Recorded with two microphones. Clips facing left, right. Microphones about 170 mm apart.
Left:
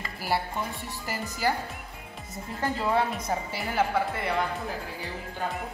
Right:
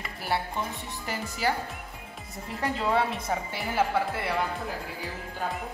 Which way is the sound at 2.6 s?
Centre (ahead or behind).